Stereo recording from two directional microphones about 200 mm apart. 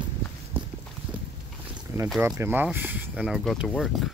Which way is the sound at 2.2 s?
15° right (ahead or behind).